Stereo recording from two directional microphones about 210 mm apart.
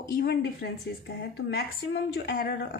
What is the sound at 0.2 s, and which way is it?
A woman's voice, 50° left (ahead or behind).